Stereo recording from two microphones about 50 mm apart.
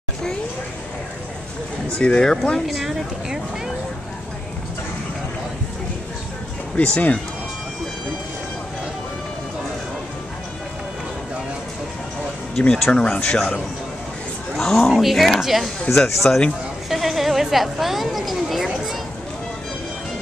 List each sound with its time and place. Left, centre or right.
2.0 s speech: centre
2.6 s a woman's voice: centre
6.8 s speech: left
12.5 s speech: centre
14.6 s speech: centre
14.9 s a woman's voice: centre
16.0 s speech: centre
16.9 s a woman's voice: centre